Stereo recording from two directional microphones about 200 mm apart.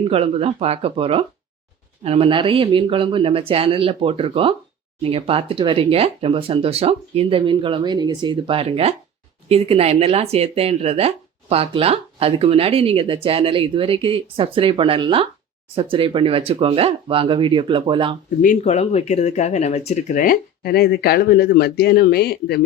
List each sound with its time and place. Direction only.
0.0 s speech: 30° right (ahead or behind)
18.4 s speech: 35° left (ahead or behind); by 22.6 s 50° left (ahead or behind)